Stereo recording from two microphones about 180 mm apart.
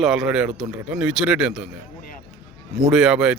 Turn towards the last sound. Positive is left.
turn(degrees=-5)  # may be behind; listen again after turning